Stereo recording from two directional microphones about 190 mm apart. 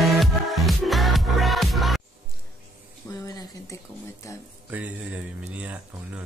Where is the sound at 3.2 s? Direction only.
20° left (ahead or behind).